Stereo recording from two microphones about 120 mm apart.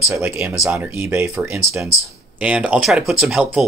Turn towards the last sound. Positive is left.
turn(degrees=-5)  # may be behind; listen again after turning